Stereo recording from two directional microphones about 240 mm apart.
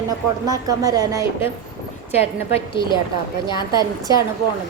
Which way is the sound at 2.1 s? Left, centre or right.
Left.